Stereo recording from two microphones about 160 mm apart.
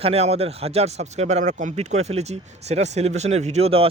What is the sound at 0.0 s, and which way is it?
Speech, 40° right (ahead or behind).